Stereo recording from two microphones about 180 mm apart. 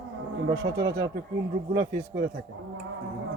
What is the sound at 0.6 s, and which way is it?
Speech, 70° right (ahead or behind).